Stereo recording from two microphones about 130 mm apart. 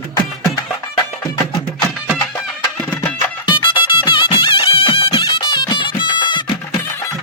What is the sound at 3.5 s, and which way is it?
Music, 40° left (ahead or behind).